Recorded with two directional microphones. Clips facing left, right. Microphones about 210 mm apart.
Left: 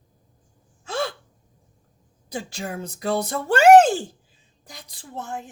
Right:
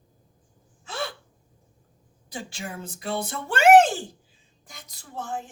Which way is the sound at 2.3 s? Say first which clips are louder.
Left 5 dB; 40° left (ahead or behind).